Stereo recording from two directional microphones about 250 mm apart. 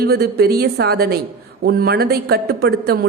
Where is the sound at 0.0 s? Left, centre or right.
Right.